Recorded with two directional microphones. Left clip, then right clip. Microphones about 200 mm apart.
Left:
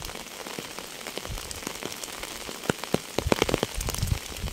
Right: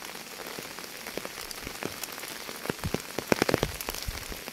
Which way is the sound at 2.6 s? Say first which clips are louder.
Left 6 dB; 40° left (ahead or behind).